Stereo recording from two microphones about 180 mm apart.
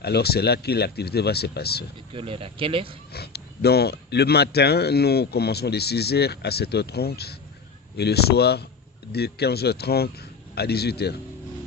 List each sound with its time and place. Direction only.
0.0 s speech: 60° left (ahead or behind)
2.1 s speech: 30° right (ahead or behind)
3.1 s speech: 60° left (ahead or behind)